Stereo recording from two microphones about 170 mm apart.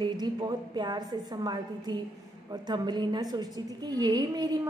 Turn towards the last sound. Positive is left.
turn(degrees=-20)  # may be behind; listen again after turning